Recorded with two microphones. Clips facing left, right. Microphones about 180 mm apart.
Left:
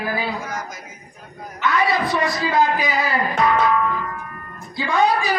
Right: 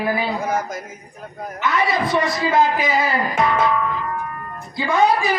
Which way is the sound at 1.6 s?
25° right (ahead or behind).